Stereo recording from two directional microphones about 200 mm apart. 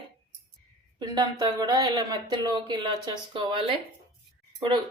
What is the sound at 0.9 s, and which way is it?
Speech, 20° right (ahead or behind).